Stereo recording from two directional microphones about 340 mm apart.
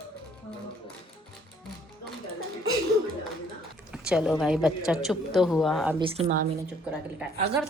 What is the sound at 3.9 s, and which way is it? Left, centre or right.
Speech, centre.